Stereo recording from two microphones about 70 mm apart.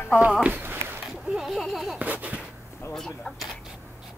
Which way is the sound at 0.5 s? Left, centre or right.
Right.